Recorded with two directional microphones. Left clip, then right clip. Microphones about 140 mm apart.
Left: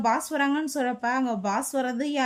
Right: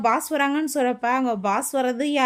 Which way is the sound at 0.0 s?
30° right (ahead or behind).